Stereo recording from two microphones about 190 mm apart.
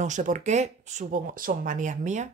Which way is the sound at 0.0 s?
40° right (ahead or behind).